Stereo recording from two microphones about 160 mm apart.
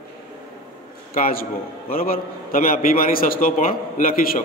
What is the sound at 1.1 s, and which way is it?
A man's voice, 60° left (ahead or behind).